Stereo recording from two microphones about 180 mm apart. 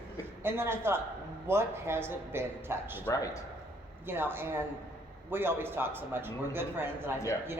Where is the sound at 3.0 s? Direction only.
20° left (ahead or behind).